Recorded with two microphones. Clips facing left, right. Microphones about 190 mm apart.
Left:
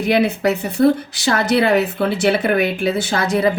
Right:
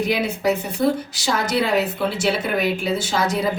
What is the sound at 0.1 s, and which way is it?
A woman's voice, 60° left (ahead or behind).